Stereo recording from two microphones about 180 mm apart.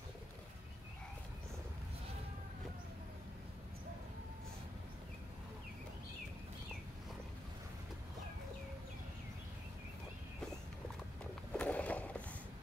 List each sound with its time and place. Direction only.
11.5 s skateboard: 10° left (ahead or behind)